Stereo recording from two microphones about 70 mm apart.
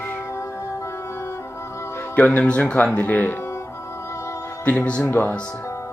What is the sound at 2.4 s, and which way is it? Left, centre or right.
Speech, centre.